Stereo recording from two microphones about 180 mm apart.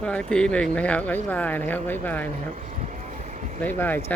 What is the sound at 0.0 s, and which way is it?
Speech, 5° left (ahead or behind).